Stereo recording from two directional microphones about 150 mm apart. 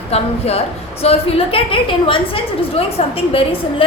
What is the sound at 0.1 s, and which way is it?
A woman's voice, 45° left (ahead or behind).